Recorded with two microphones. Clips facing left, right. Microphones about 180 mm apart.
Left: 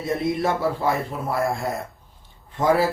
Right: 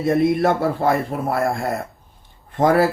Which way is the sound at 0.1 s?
55° right (ahead or behind).